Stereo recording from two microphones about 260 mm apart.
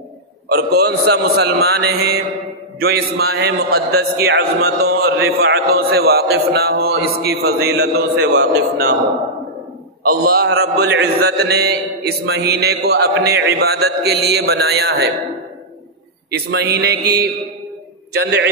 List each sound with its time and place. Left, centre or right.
0.5 s a man's voice: right
10.0 s a man's voice: right
16.3 s a man's voice: right